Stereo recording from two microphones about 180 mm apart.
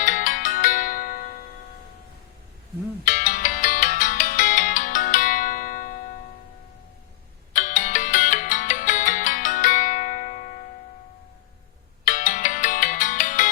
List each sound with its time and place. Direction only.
0.0 s music: 45° left (ahead or behind)
3.0 s ringtone: 45° left (ahead or behind)
7.5 s music: 45° left (ahead or behind)
12.0 s ringtone: 45° left (ahead or behind)